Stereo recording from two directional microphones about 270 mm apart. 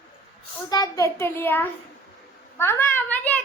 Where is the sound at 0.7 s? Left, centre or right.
Centre.